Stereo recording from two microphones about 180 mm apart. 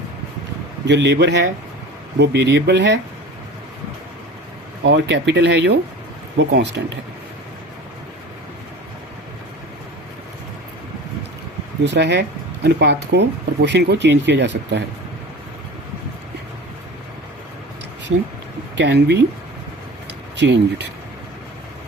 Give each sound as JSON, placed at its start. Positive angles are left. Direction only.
{"t": 0.9, "sound": "speech", "side_deg": -75}
{"t": 4.8, "sound": "speech", "side_deg": -80}
{"t": 11.8, "sound": "speech", "side_deg": -75}
{"t": 18.8, "sound": "speech", "side_deg": -70}
{"t": 20.3, "sound": "speech", "side_deg": -75}